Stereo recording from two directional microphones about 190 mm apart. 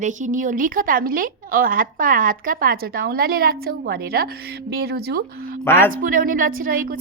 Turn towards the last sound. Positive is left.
turn(degrees=-45)  # may be behind; listen again after turning